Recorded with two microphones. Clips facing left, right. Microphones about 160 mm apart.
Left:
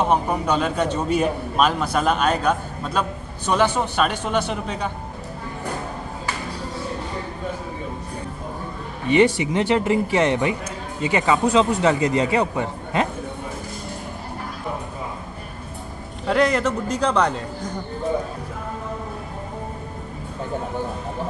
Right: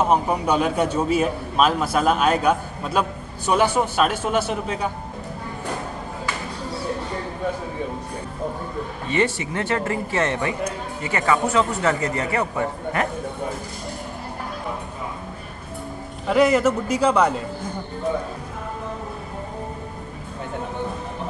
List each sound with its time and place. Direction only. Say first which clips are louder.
0.0 s a man's voice: right 1 dB; 5° right (ahead or behind)
9.0 s a man's voice: left 6 dB; 15° left (ahead or behind)
16.3 s a man's voice: right 2 dB; 5° right (ahead or behind)